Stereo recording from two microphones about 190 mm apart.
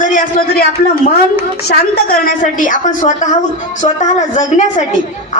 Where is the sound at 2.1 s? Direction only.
45° left (ahead or behind).